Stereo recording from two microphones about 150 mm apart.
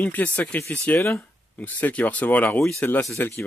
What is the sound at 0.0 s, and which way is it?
Speech, 10° left (ahead or behind).